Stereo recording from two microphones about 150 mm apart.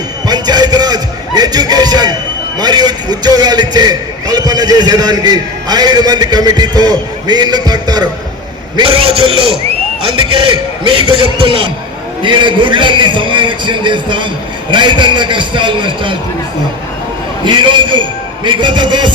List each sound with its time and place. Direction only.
0.3 s a sound: 30° right (ahead or behind)
2.6 s a man's voice: 30° right (ahead or behind)
8.7 s a man's voice: 35° right (ahead or behind)
17.4 s a man's voice: 30° right (ahead or behind)